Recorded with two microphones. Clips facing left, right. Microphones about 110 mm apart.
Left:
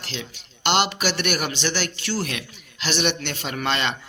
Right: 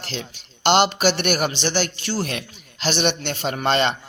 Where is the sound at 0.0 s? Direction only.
35° right (ahead or behind).